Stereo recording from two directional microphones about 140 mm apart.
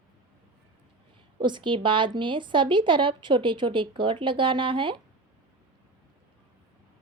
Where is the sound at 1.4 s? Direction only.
35° right (ahead or behind).